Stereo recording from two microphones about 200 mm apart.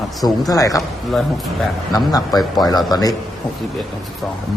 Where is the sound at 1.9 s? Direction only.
20° left (ahead or behind).